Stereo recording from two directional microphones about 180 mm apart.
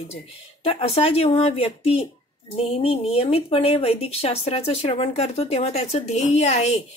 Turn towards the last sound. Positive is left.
turn(degrees=35)  # may be behind; listen again after turning